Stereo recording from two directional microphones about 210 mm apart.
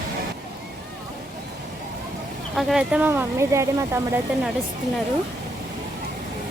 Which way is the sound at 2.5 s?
5° right (ahead or behind).